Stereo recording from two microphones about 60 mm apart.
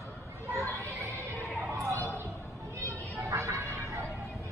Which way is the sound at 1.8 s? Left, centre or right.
Right.